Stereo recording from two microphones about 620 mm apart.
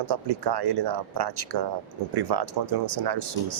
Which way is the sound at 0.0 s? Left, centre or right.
Right.